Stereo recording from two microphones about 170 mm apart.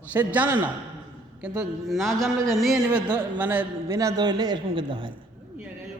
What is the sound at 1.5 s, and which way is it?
A man's voice, centre (ahead or behind).